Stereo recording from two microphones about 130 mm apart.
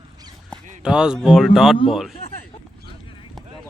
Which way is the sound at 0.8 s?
5° right (ahead or behind).